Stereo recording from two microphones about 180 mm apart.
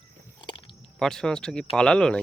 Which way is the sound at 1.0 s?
5° left (ahead or behind).